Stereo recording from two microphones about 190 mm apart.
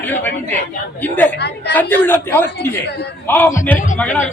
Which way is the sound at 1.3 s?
60° left (ahead or behind).